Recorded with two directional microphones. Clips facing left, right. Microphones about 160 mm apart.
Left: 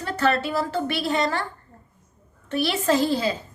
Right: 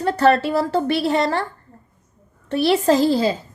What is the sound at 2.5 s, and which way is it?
Speech, 35° right (ahead or behind).